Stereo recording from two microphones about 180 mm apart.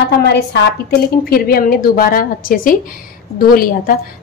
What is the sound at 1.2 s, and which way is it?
A woman's voice, 55° left (ahead or behind).